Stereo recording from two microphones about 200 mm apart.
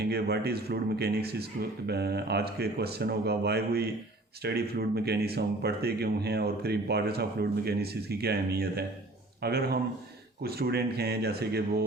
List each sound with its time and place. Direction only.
0.0 s speech: 55° right (ahead or behind)